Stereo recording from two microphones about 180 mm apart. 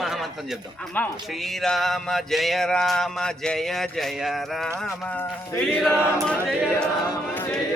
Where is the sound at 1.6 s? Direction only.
Centre (ahead or behind).